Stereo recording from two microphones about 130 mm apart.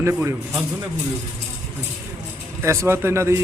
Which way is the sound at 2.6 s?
20° right (ahead or behind).